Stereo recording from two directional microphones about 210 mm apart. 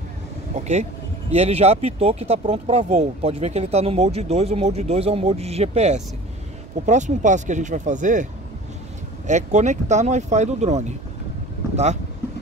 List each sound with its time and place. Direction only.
0.6 s speech: 35° right (ahead or behind)
9.3 s speech: 35° right (ahead or behind)